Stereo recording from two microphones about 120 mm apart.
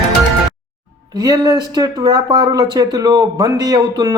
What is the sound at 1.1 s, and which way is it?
Speech, 30° right (ahead or behind).